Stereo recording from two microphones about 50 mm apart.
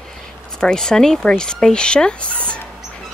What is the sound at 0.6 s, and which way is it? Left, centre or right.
A woman's voice, centre.